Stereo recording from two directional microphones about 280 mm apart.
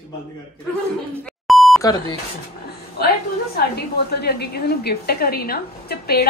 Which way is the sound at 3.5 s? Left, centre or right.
Left.